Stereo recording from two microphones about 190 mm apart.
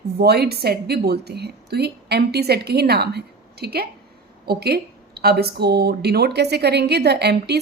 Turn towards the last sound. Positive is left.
turn(degrees=-60)  # may be behind; listen again after turning